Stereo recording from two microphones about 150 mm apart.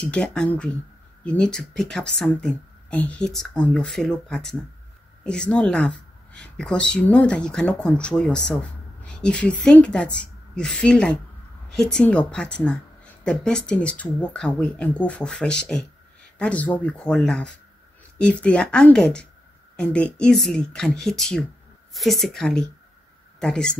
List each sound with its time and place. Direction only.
0.0 s speech: 5° left (ahead or behind)